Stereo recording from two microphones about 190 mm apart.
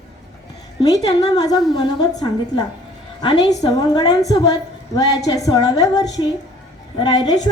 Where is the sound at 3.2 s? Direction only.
20° left (ahead or behind).